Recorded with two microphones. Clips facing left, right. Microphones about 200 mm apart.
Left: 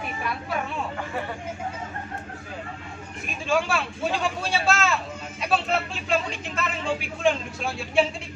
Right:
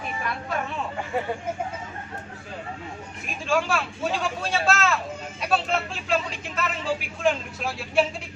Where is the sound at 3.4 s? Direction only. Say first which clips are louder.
Even; centre (ahead or behind).